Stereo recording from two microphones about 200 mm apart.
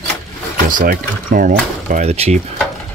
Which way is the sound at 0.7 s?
45° right (ahead or behind).